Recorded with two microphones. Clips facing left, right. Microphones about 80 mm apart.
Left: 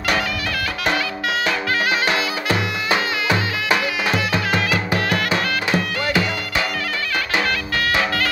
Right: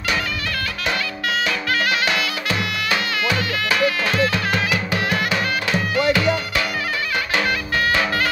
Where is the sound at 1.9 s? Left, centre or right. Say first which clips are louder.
Left 1 dB; left.